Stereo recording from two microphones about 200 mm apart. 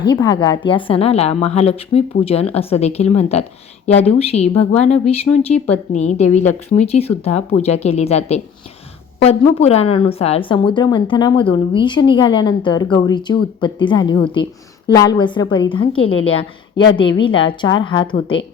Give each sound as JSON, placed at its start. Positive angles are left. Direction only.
{"t": 0.0, "sound": "a woman's voice", "side_deg": 20}